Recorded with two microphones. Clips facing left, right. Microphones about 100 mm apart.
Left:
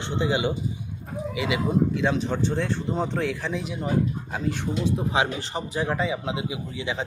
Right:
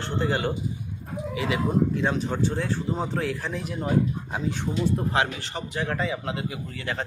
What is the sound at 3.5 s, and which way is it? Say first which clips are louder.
Speech: left 2 dB; 15° left (ahead or behind).